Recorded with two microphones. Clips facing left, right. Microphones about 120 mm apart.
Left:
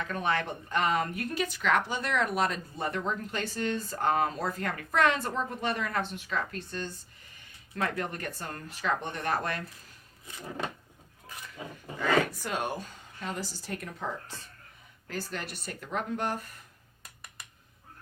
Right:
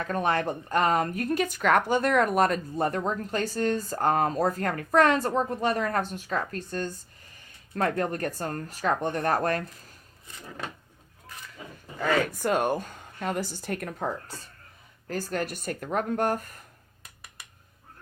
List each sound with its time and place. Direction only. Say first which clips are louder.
0.0 s speech: right 4 dB; 40° right (ahead or behind)
11.9 s speech: right 1 dB; 45° right (ahead or behind)
15.0 s speech: right 7 dB; 45° right (ahead or behind)